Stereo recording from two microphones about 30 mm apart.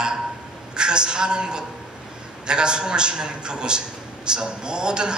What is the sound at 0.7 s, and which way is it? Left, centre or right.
A man's voice, right.